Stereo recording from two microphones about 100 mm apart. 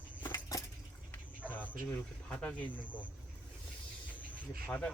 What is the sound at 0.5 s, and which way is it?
Coin, 35° left (ahead or behind).